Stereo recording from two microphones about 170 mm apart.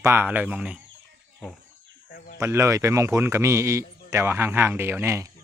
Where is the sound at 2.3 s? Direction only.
15° right (ahead or behind).